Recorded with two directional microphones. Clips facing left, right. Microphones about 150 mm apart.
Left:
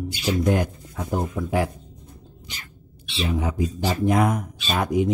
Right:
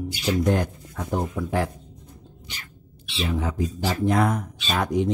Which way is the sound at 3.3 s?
15° left (ahead or behind).